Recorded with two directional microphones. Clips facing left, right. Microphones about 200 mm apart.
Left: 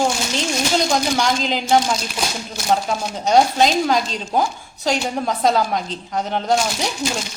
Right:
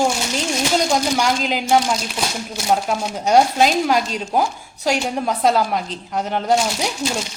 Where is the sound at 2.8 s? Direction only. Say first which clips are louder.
Right 1 dB; 10° right (ahead or behind).